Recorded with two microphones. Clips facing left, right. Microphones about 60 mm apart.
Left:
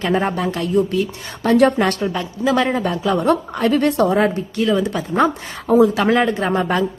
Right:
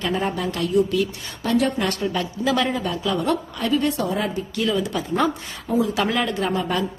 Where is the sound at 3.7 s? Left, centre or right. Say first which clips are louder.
Left 5 dB; left.